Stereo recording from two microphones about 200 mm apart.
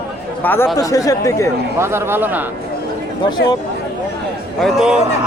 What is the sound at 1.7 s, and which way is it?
Speech, 10° right (ahead or behind).